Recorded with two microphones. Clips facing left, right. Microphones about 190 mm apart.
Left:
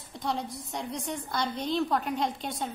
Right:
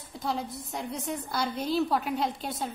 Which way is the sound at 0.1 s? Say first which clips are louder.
Even; centre (ahead or behind).